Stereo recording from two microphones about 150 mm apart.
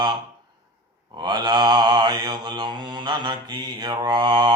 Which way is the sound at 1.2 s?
30° right (ahead or behind).